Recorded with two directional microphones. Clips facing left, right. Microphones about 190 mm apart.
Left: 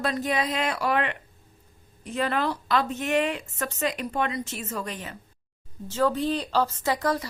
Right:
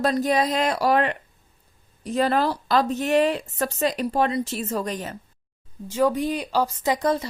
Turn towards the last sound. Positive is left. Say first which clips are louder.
# right 3 dB
turn(degrees=-20)  # may be behind; listen again after turning